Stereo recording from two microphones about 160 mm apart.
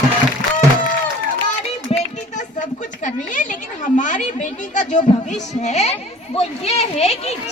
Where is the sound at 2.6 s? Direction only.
50° left (ahead or behind).